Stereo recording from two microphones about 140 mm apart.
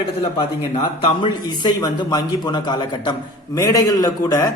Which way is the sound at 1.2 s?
30° left (ahead or behind).